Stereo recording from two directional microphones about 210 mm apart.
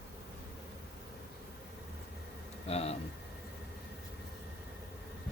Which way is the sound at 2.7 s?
30° left (ahead or behind).